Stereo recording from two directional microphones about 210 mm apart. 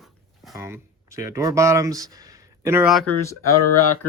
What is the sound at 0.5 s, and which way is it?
Speech, 15° right (ahead or behind).